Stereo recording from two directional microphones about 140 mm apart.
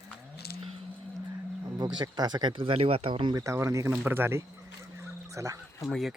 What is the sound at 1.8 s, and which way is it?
Speech, 30° right (ahead or behind).